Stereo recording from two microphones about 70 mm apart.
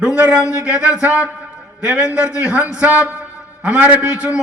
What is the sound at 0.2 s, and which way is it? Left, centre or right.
A man's voice, centre.